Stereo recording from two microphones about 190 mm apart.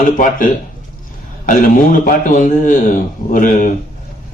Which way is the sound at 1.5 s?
45° left (ahead or behind).